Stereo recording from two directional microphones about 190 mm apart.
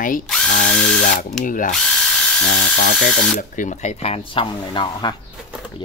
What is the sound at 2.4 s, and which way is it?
Speech, 65° left (ahead or behind).